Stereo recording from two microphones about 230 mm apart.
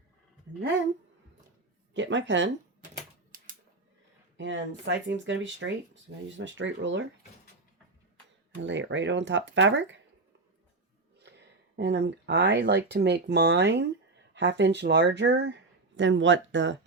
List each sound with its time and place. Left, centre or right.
1.9 s speech: right
4.4 s speech: right
8.6 s speech: right
11.8 s speech: right